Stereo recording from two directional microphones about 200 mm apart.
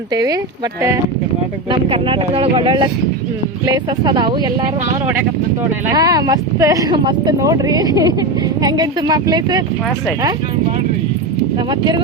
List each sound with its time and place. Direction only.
1.7 s speech: 25° right (ahead or behind)
5.9 s speech: 20° right (ahead or behind)
11.7 s speech: 20° right (ahead or behind)